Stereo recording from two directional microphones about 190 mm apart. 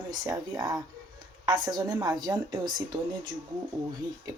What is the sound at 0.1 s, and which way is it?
A woman's voice, 20° right (ahead or behind).